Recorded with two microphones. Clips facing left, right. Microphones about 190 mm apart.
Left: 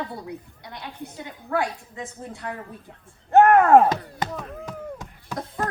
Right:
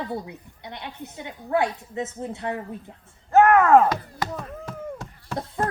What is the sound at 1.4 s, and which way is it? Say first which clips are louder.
A woman's voice: right 3 dB; 25° right (ahead or behind).